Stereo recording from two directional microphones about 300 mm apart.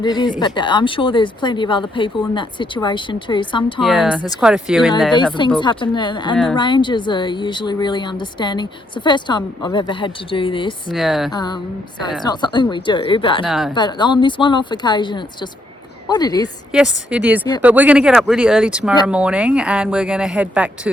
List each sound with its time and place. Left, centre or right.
0.0 s speech: centre
3.8 s speech: centre
5.5 s speech: centre
6.3 s speech: centre
6.6 s speech: centre
10.9 s speech: centre
11.3 s speech: centre
13.4 s speech: centre
13.7 s speech: centre
16.7 s speech: centre